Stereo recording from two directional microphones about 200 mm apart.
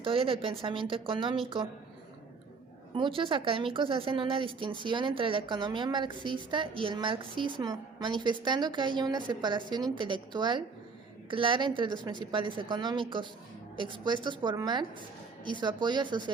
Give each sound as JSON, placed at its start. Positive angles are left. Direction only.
{"t": 0.0, "sound": "speech", "side_deg": -25}
{"t": 2.9, "sound": "speech", "side_deg": -25}